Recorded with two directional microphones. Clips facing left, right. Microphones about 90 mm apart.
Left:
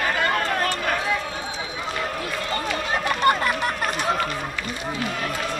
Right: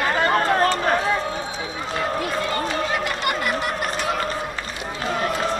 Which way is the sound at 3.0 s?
35° left (ahead or behind).